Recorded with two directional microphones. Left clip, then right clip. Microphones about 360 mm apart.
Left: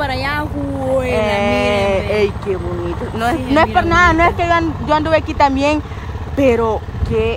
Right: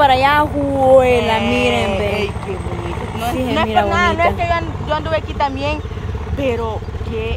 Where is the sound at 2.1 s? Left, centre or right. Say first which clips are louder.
Left 4 dB; centre.